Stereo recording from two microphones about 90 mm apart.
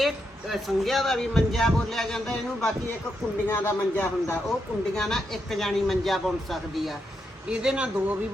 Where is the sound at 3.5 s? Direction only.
25° left (ahead or behind).